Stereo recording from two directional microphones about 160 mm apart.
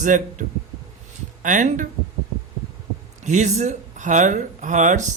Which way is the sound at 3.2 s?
45° right (ahead or behind).